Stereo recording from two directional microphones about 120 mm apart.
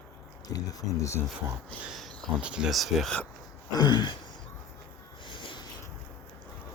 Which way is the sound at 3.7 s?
35° left (ahead or behind).